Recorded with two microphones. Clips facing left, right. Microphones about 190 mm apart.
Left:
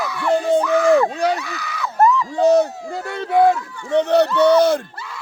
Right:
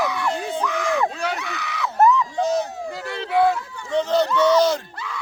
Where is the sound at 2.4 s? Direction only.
60° left (ahead or behind).